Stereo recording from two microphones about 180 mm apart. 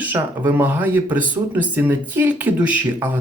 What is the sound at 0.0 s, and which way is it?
Speech, 10° right (ahead or behind).